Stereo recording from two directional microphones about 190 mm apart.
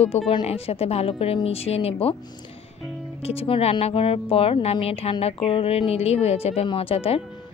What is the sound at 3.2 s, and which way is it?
A woman's voice, 30° left (ahead or behind).